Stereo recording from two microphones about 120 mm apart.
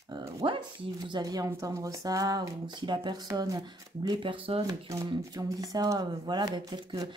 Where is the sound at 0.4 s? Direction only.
45° right (ahead or behind).